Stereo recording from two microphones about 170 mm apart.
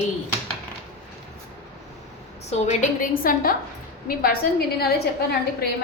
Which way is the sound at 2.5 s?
40° left (ahead or behind).